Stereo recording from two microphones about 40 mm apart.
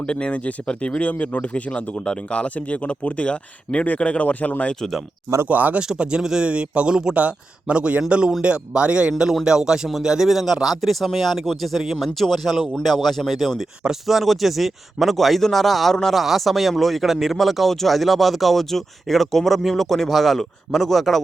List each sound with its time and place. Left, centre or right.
0.0 s speech: left
5.5 s speech: right
6.0 s speech: right
7.1 s speech: right; by 13.5 s centre
14.1 s speech: centre